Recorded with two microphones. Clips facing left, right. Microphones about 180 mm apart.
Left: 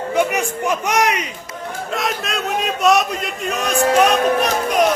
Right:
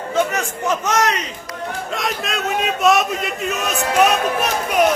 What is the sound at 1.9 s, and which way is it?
A man's voice, centre (ahead or behind).